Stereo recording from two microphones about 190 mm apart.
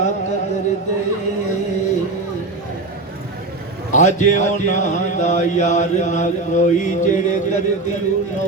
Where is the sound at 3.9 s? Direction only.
40° left (ahead or behind).